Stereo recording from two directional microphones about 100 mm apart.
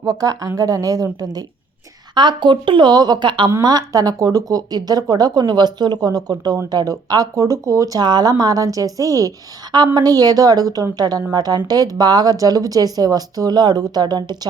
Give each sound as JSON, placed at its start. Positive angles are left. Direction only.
{"t": 0.0, "sound": "a woman's voice", "side_deg": -40}
{"t": 2.1, "sound": "a woman's voice", "side_deg": -50}
{"t": 3.6, "sound": "a woman's voice", "side_deg": -40}